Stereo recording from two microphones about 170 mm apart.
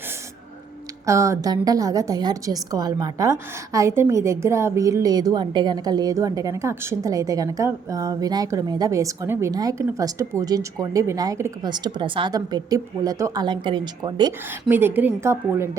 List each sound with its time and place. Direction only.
1.0 s a woman's voice: 20° right (ahead or behind)
14.7 s a woman's voice: 10° right (ahead or behind)